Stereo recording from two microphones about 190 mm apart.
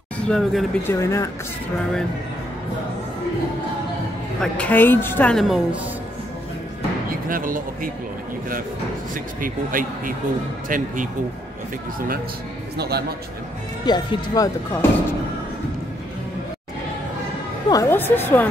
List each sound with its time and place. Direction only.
0.3 s speech: centre (ahead or behind)
0.8 s a woman's voice: 15° left (ahead or behind)
4.4 s a woman's voice: 10° left (ahead or behind)
7.1 s speech: 45° right (ahead or behind)
9.1 s speech: 45° right (ahead or behind)
12.7 s a man's voice: 55° right (ahead or behind)
13.8 s speech: 20° left (ahead or behind)
17.6 s a woman's voice: 15° left (ahead or behind)